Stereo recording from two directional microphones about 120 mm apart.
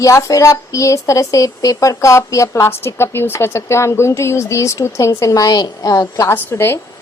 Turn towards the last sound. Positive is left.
turn(degrees=20)  # may be behind; listen again after turning